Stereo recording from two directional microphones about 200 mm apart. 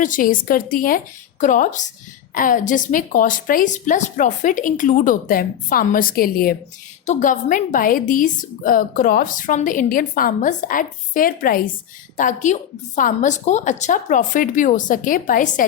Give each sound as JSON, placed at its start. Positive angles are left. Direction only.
{"t": 0.0, "sound": "a woman's voice", "side_deg": 40}